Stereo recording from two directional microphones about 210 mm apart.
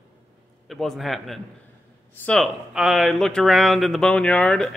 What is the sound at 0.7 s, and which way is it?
Speech, centre (ahead or behind).